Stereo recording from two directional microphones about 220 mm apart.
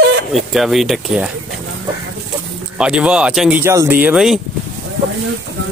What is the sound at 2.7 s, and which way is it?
Speech, 5° right (ahead or behind).